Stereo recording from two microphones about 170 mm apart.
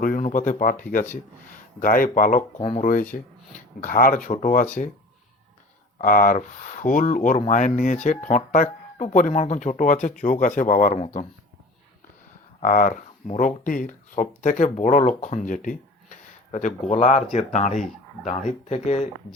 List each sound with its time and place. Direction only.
0.0 s speech: 50° left (ahead or behind)
2.6 s speech: 35° left (ahead or behind)
2.8 s speech: 50° left (ahead or behind)
6.0 s speech: 50° left (ahead or behind)
12.5 s speech: 50° left (ahead or behind)